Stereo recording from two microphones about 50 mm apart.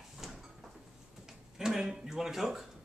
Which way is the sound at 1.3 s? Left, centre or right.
Centre.